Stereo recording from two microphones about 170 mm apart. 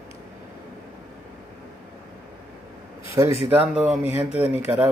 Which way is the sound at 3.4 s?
10° right (ahead or behind).